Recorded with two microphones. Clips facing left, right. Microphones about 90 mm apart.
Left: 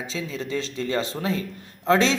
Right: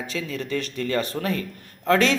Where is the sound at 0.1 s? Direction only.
25° left (ahead or behind).